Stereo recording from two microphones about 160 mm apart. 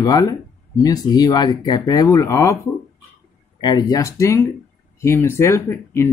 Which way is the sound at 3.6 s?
25° left (ahead or behind).